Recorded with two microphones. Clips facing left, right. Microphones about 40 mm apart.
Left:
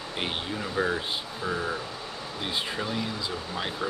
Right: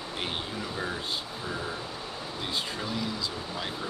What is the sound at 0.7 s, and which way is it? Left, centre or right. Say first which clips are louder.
Speech: left 9 dB; left.